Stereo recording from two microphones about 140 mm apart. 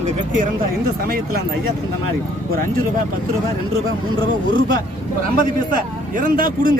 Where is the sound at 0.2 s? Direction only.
65° right (ahead or behind).